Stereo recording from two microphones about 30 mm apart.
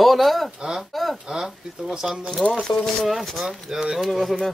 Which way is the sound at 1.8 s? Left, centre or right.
Centre.